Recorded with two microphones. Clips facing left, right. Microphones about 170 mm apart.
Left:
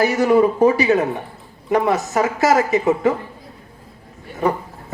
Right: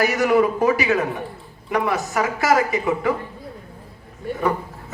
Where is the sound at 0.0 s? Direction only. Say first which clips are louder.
Left 3 dB; 30° left (ahead or behind).